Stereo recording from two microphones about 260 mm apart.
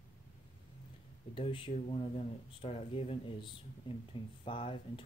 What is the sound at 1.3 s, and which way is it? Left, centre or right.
Speech, centre.